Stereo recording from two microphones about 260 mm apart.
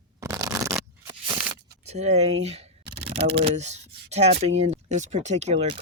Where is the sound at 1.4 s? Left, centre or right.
Right.